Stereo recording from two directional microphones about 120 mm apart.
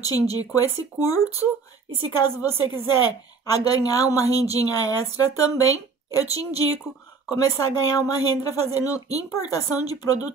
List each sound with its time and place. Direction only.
0.0 s a woman's voice: 30° left (ahead or behind)